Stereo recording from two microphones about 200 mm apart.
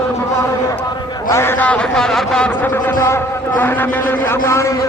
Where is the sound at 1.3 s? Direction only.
10° left (ahead or behind).